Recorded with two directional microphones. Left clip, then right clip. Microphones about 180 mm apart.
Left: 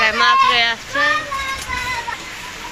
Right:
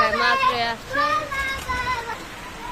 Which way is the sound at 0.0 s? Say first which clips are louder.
Left 5 dB; centre (ahead or behind).